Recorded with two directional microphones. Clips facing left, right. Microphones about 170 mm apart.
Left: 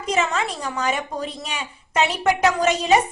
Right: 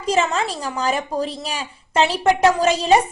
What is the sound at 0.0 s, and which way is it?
A woman's voice, 30° right (ahead or behind).